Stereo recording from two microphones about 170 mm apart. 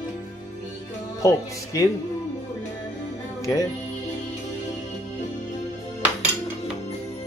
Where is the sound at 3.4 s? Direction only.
20° left (ahead or behind).